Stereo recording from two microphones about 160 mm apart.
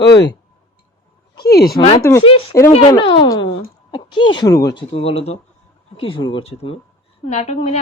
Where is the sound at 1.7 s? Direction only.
35° left (ahead or behind).